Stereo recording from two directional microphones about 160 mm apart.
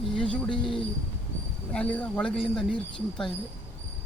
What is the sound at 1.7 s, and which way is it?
Speech, 10° left (ahead or behind).